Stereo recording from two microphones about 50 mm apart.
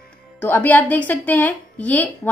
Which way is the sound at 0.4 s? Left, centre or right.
Left.